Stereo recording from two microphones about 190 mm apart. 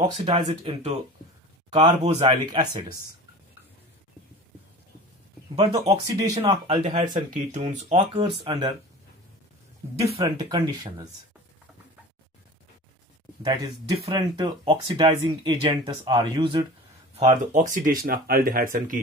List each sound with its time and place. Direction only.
0.0 s speech: 30° right (ahead or behind)
2.4 s speech: 20° right (ahead or behind)
5.8 s speech: 20° right (ahead or behind)
7.5 s speech: 35° right (ahead or behind)
9.9 s speech: 30° right (ahead or behind)
13.4 s speech: 20° right (ahead or behind)
17.5 s speech: 40° right (ahead or behind)